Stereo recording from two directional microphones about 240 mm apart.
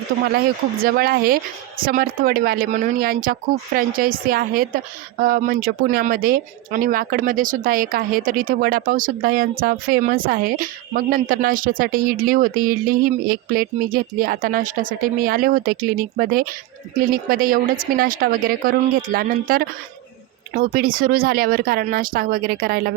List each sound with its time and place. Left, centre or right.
0.3 s speech: right